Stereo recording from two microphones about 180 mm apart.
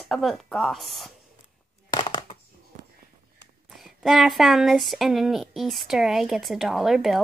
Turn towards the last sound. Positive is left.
turn(degrees=0)  # may be behind; listen again after turning